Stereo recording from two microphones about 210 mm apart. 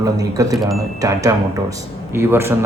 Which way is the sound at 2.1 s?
10° right (ahead or behind).